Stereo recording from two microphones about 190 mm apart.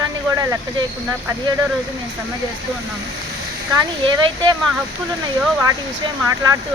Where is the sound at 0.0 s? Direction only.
20° right (ahead or behind).